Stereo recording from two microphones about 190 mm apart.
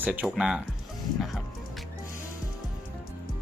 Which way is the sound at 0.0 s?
10° right (ahead or behind).